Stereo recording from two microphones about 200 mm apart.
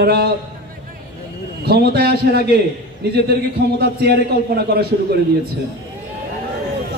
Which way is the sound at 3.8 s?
50° right (ahead or behind).